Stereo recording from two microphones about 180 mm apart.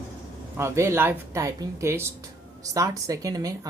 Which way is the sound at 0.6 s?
15° right (ahead or behind).